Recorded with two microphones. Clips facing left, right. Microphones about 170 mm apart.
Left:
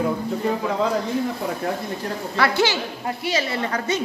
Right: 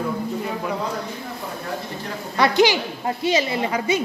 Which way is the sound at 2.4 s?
15° right (ahead or behind).